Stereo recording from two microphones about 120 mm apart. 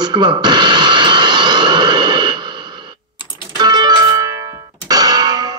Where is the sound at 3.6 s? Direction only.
35° right (ahead or behind).